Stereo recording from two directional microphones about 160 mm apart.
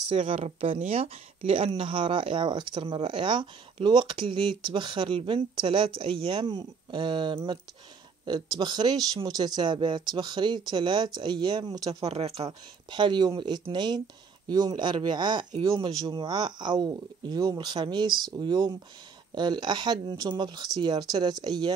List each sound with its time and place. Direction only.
0.1 s speech: 30° right (ahead or behind)
11.9 s speech: 40° right (ahead or behind)